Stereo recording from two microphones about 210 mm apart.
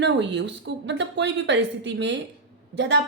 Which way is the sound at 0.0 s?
55° right (ahead or behind).